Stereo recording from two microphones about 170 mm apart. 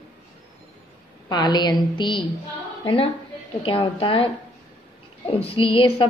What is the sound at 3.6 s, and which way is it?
Speech, 30° left (ahead or behind).